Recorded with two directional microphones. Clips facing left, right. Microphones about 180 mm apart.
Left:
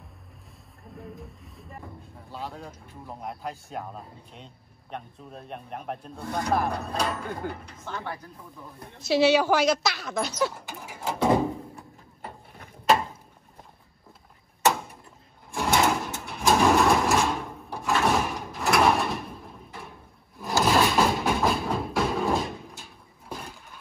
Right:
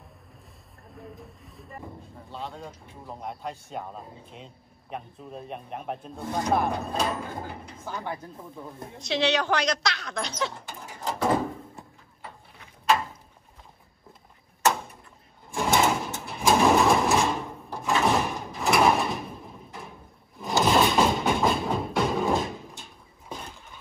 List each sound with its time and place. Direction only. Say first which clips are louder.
1.1 s speech: left 2 dB; centre (ahead or behind)
6.1 s speech: right 1 dB; 15° right (ahead or behind)
6.5 s speech: right 1 dB; centre (ahead or behind)
7.8 s speech: right 2 dB; 15° right (ahead or behind)
8.9 s speech: left 5 dB; 5° left (ahead or behind)
11.1 s door: left 3 dB; 15° left (ahead or behind)
12.2 s a sound: left 3 dB; 40° left (ahead or behind)
15.5 s a sound: even; centre (ahead or behind)
20.3 s music: right 1 dB; centre (ahead or behind)